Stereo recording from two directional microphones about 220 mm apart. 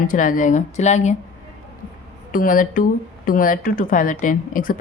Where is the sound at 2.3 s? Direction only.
40° left (ahead or behind).